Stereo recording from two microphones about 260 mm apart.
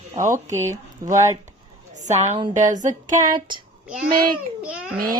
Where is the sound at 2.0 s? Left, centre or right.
Right.